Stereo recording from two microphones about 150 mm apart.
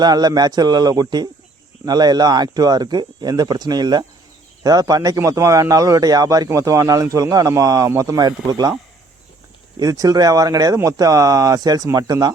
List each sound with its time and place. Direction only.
0.0 s a man's voice: 25° right (ahead or behind)
9.7 s a man's voice: 25° right (ahead or behind)